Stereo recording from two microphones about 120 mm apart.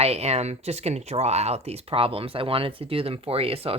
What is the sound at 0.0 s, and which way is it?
Speech, 60° right (ahead or behind).